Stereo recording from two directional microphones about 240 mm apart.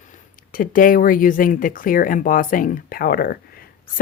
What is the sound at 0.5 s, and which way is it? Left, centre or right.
Speech, left.